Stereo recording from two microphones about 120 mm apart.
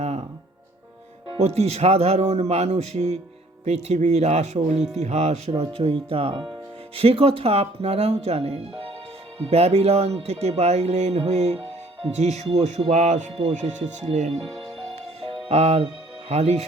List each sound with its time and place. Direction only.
1.4 s speech: 60° right (ahead or behind)
5.5 s speech: 55° right (ahead or behind)
15.4 s speech: 60° right (ahead or behind)